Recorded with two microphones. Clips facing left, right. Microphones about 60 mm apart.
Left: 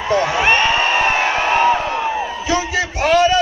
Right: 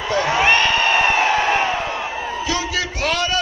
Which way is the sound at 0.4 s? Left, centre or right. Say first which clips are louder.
Right 1 dB; left.